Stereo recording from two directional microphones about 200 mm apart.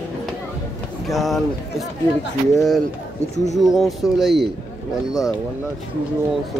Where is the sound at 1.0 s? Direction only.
Centre (ahead or behind).